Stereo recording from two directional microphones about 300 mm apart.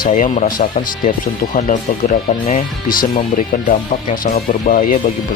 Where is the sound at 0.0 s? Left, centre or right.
Left.